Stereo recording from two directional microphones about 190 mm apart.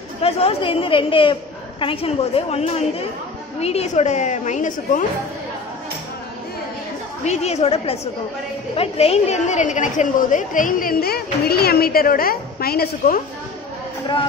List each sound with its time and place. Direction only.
0.2 s a woman's voice: 30° left (ahead or behind)
7.2 s a woman's voice: 35° left (ahead or behind); by 13.2 s 50° left (ahead or behind)